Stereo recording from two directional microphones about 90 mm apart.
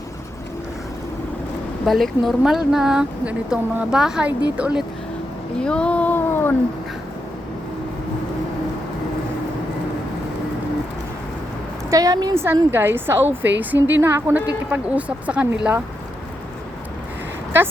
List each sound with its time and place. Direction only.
1.8 s speech: centre (ahead or behind)
5.5 s a sound: 10° left (ahead or behind)
11.9 s a woman's voice: 40° right (ahead or behind)
12.3 s a woman's voice: 25° right (ahead or behind)
14.4 s speech: 15° right (ahead or behind)